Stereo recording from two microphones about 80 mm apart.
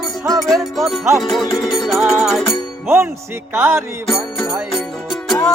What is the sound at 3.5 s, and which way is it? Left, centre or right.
Music, right.